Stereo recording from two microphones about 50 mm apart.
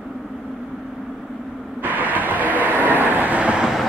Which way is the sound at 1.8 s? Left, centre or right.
Right.